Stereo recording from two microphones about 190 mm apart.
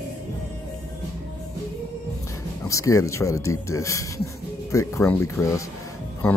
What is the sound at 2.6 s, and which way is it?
Speech, 15° left (ahead or behind).